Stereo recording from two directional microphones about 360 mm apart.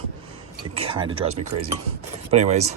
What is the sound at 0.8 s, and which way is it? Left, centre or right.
Speech, centre.